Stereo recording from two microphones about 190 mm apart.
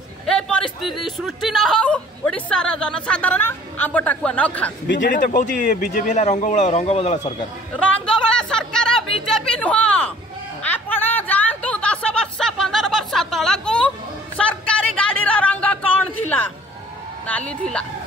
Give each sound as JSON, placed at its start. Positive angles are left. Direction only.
{"t": 0.3, "sound": "speech", "side_deg": 5}
{"t": 5.0, "sound": "speech", "side_deg": 45}
{"t": 7.7, "sound": "a sound", "side_deg": 5}
{"t": 17.3, "sound": "a woman's voice", "side_deg": 5}